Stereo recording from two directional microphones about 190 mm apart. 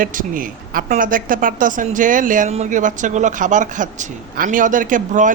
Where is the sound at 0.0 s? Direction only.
45° right (ahead or behind).